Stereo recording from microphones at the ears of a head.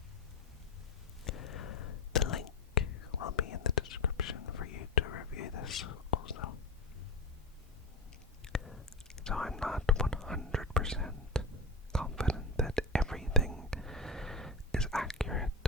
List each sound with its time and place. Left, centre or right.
1.2 s whispering: left
9.2 s whispering: centre
12.0 s whispering: centre